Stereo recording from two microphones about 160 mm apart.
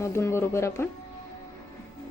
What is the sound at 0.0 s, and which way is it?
Speech, 15° left (ahead or behind).